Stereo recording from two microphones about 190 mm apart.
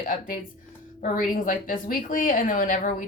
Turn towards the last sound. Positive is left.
turn(degrees=45)  # may be behind; listen again after turning